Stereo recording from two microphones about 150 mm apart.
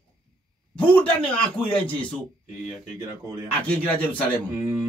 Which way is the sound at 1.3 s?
5° left (ahead or behind).